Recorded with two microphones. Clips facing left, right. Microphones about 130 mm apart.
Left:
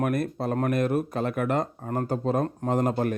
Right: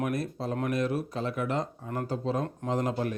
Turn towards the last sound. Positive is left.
turn(degrees=55)  # may be behind; listen again after turning